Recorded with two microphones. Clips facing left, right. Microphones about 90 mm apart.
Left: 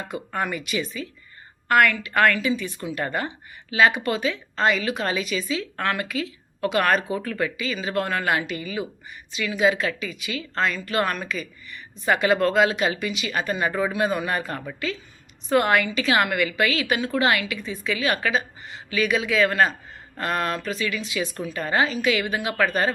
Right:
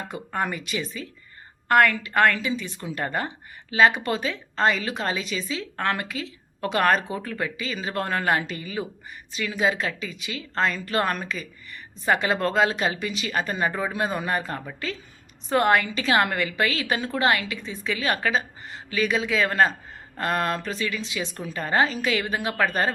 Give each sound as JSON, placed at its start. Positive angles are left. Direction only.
{"t": 0.3, "sound": "a woman's voice", "side_deg": -30}